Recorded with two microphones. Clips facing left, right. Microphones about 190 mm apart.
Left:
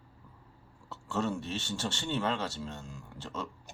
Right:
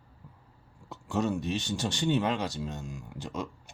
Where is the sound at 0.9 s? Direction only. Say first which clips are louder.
Right 3 dB; 15° right (ahead or behind).